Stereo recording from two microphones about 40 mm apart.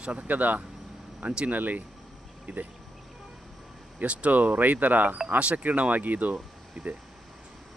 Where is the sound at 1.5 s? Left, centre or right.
Right.